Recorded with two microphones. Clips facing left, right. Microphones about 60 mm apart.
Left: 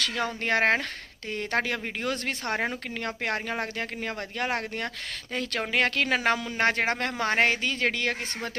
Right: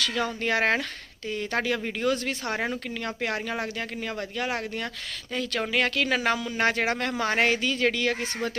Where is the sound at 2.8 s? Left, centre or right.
Left.